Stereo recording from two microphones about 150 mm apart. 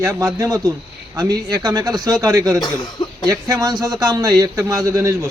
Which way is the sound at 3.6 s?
25° right (ahead or behind).